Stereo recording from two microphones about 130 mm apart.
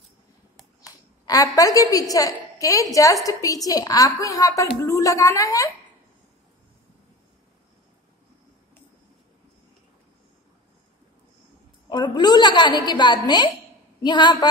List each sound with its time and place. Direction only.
0.8 s a woman's voice: 25° left (ahead or behind)
11.9 s a sound: 35° left (ahead or behind)
14.0 s speech: 35° left (ahead or behind)